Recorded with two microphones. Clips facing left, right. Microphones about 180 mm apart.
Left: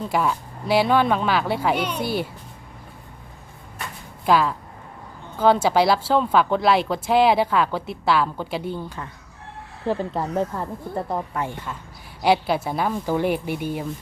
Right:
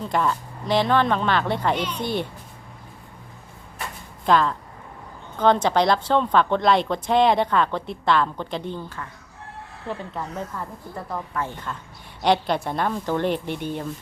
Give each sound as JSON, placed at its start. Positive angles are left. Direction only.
{"t": 0.0, "sound": "speech", "side_deg": 5}
{"t": 4.3, "sound": "a woman's voice", "side_deg": 5}
{"t": 9.8, "sound": "speech", "side_deg": 35}
{"t": 11.4, "sound": "speech", "side_deg": 10}